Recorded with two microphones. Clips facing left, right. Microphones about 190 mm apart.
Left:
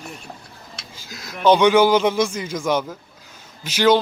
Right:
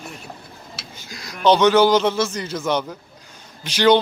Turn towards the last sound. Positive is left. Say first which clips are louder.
# right 1 dB
turn(degrees=5)  # may be behind; listen again after turning